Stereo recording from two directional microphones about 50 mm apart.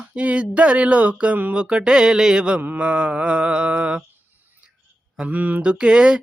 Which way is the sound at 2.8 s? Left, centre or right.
Right.